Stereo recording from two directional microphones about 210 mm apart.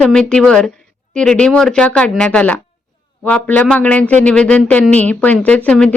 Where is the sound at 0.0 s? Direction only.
5° left (ahead or behind).